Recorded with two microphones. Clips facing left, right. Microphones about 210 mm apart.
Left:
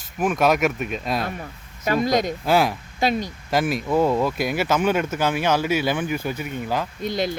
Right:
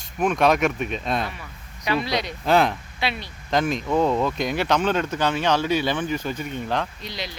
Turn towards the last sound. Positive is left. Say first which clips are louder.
# left 10 dB
turn(degrees=50)  # may be behind; listen again after turning